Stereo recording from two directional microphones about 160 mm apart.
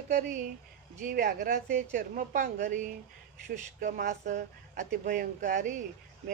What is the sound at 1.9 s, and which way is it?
A woman's voice, 55° right (ahead or behind).